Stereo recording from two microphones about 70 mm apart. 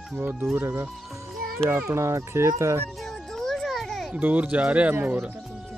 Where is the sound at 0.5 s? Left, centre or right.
Right.